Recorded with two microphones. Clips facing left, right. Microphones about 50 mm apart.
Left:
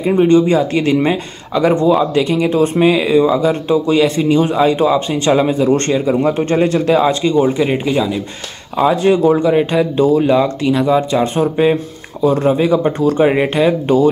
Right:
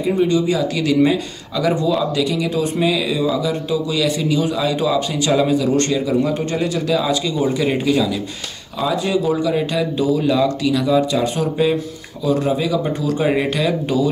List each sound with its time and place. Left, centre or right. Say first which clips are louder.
0.0 s speech: left 6 dB; left
8.9 s speech: left 5 dB; left